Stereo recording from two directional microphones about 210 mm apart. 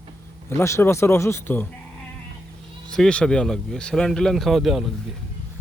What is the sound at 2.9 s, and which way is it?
Speech, 5° left (ahead or behind).